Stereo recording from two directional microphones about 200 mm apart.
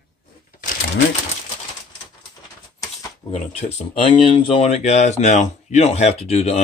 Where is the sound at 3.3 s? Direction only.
35° left (ahead or behind).